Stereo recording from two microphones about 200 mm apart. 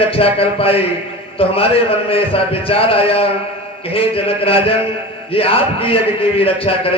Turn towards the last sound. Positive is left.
turn(degrees=25)  # may be behind; listen again after turning